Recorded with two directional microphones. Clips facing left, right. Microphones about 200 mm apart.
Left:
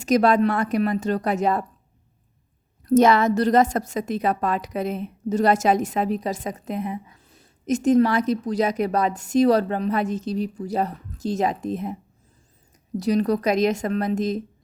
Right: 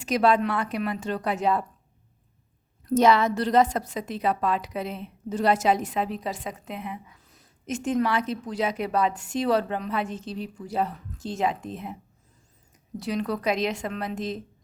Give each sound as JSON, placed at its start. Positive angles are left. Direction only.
{"t": 0.0, "sound": "a woman's voice", "side_deg": 45}
{"t": 2.9, "sound": "a woman's voice", "side_deg": 50}
{"t": 7.2, "sound": "a woman's voice", "side_deg": 30}
{"t": 13.0, "sound": "a woman's voice", "side_deg": 40}